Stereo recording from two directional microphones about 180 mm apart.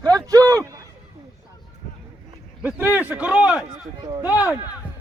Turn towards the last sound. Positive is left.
turn(degrees=-10)  # may be behind; listen again after turning